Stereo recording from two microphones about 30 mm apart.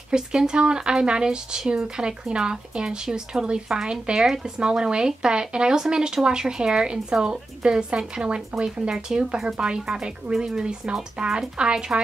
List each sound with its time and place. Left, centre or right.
0.1 s speech: right